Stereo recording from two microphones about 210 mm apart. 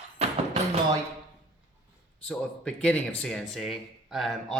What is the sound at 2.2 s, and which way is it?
Speech, 5° left (ahead or behind).